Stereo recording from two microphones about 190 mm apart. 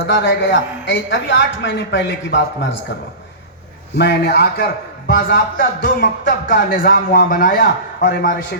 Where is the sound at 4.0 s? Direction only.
60° left (ahead or behind).